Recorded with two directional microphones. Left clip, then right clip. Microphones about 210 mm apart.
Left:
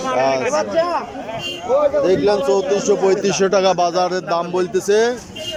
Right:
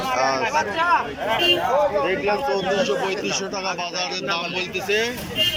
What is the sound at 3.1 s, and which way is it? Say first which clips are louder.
A man's voice: left 9 dB; 50° left (ahead or behind).